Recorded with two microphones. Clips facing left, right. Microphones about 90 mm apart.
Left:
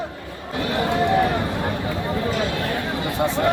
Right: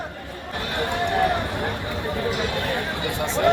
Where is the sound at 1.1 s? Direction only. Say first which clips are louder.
Right 1 dB; 20° left (ahead or behind).